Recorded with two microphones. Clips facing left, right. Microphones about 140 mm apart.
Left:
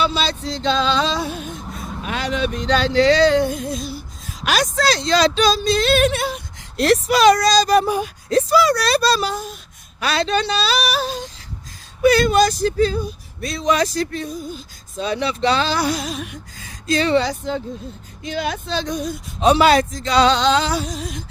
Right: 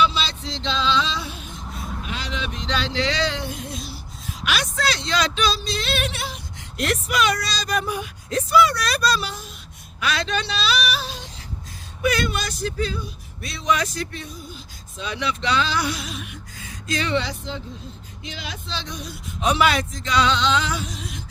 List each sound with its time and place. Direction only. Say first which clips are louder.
0.0 s music: left 2 dB; 45° left (ahead or behind)
2.0 s speech: left 10 dB; 55° left (ahead or behind)
6.7 s speech: left 7 dB; 35° left (ahead or behind)
19.4 s speech: left 6 dB; 35° left (ahead or behind)